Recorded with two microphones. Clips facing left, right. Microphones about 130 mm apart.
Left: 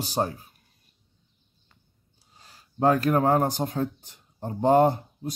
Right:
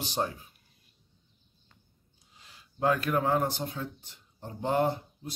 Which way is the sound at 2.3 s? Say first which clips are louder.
Left 9 dB; 40° left (ahead or behind).